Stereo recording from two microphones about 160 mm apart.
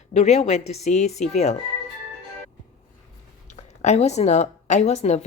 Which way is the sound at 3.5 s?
45° left (ahead or behind).